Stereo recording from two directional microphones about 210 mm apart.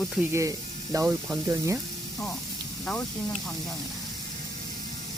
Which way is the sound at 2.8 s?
Centre (ahead or behind).